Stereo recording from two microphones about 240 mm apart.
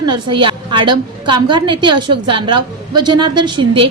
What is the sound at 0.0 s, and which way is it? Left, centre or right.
A woman's voice, centre.